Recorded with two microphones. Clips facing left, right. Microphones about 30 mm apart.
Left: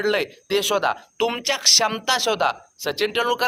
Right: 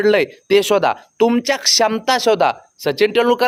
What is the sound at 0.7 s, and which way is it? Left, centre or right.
Speech, right.